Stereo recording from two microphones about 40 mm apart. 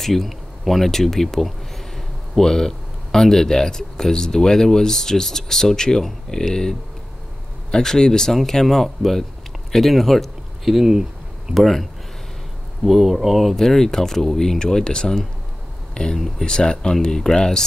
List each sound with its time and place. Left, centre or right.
0.0 s speech: centre
10.6 s a sound: centre
11.6 s speech: centre
13.7 s speech: centre